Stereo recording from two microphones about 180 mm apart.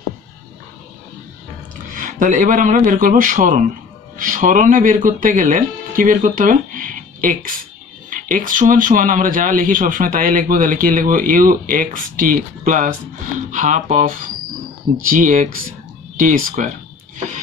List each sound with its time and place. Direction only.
2.0 s speech: 45° right (ahead or behind)